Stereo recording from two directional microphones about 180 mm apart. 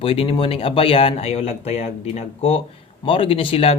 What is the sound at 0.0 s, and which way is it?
Speech, 30° left (ahead or behind).